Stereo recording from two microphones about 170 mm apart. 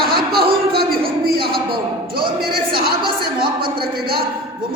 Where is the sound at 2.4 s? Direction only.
60° right (ahead or behind).